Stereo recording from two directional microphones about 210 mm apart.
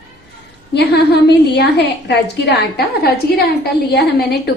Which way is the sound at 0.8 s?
50° left (ahead or behind).